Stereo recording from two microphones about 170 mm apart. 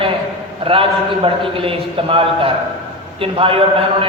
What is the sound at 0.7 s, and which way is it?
A man's voice, 30° right (ahead or behind).